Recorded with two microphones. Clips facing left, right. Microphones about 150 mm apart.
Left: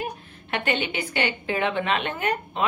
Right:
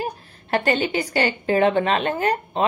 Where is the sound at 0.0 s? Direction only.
35° right (ahead or behind).